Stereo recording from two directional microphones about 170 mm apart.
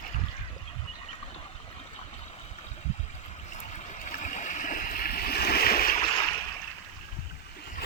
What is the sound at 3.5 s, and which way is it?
Stream, 45° left (ahead or behind).